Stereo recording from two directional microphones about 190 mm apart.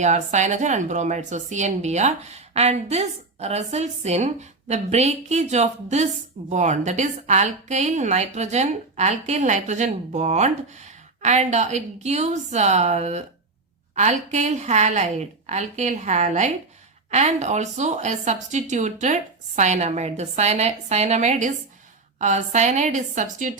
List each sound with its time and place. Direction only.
0.0 s a woman's voice: 40° right (ahead or behind)